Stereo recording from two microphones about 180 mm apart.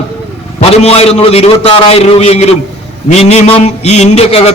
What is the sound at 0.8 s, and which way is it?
A man's voice, 35° left (ahead or behind).